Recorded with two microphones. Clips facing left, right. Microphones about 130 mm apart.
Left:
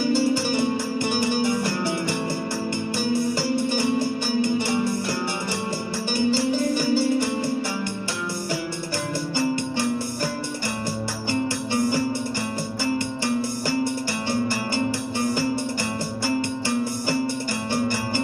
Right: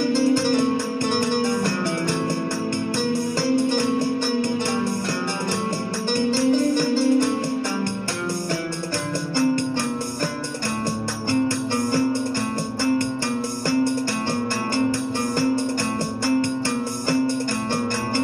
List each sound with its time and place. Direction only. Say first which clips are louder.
0.1 s music: right 3 dB; 10° left (ahead or behind)
1.1 s music: right 1 dB; 50° right (ahead or behind)
6.8 s music: right 3 dB; 10° left (ahead or behind)
11.2 s music: right 4 dB; 15° left (ahead or behind)